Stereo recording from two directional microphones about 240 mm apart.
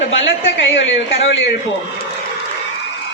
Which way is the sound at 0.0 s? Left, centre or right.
Left.